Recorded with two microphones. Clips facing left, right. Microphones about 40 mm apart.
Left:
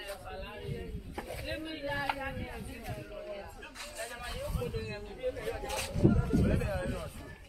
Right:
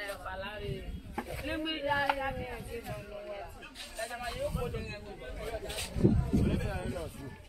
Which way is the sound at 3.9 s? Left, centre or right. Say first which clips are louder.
Right 4 dB; centre.